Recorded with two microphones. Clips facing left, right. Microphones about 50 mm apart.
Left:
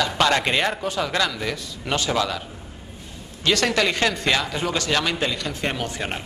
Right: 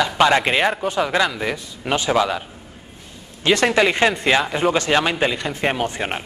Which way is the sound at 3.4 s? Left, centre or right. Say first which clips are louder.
Right 4 dB; right.